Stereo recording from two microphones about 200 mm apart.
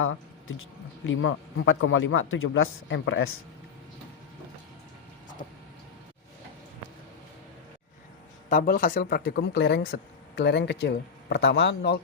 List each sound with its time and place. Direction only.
0.0 s speech: 85° left; by 3.2 s 65° left (ahead or behind)
8.4 s speech: 40° left (ahead or behind); by 11.9 s 60° left (ahead or behind)